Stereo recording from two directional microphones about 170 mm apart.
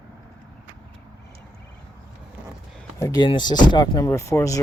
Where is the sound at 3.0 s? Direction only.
20° left (ahead or behind).